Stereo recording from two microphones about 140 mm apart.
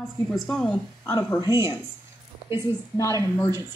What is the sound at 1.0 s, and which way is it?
Speech, 15° left (ahead or behind).